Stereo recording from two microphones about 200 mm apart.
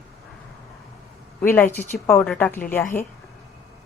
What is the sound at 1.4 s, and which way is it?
A woman's voice, 10° left (ahead or behind).